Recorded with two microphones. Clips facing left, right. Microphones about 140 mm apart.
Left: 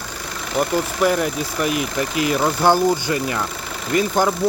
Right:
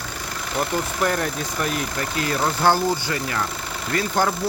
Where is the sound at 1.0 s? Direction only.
10° left (ahead or behind).